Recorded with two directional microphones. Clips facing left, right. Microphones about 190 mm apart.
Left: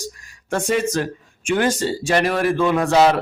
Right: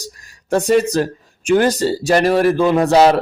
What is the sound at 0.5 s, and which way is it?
A man's voice, 40° right (ahead or behind).